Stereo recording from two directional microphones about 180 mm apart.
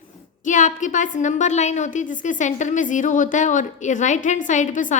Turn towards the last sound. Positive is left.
turn(degrees=45)  # may be behind; listen again after turning